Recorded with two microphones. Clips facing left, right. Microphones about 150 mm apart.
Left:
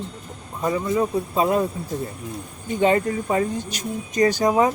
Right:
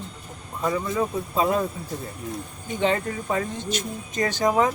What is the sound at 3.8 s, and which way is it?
Speech, 40° left (ahead or behind).